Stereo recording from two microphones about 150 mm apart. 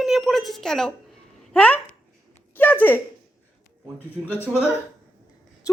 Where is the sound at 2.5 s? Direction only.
10° left (ahead or behind).